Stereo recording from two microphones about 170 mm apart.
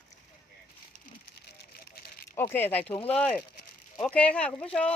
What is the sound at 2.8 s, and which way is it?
Speech, 35° left (ahead or behind).